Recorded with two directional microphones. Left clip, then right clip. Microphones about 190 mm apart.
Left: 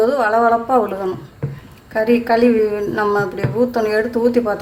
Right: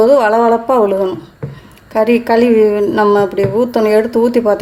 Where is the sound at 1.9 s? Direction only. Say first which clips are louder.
Right 4 dB; 50° right (ahead or behind).